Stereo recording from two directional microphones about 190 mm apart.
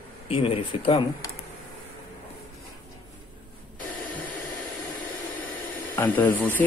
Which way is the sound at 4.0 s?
10° left (ahead or behind).